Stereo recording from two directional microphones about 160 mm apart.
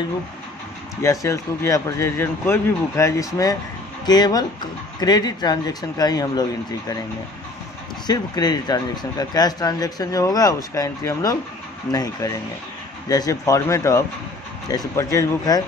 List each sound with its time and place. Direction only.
1.0 s speech: 20° left (ahead or behind)
8.1 s speech: 25° left (ahead or behind)